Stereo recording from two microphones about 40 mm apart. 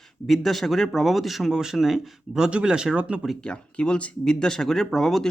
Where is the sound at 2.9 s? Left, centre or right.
Right.